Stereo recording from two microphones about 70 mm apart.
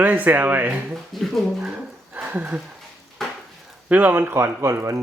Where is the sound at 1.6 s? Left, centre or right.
Centre.